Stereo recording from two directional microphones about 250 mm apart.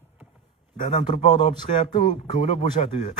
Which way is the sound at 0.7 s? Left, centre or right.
Left.